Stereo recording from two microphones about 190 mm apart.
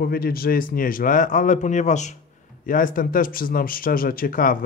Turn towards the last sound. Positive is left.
turn(degrees=50)  # may be behind; listen again after turning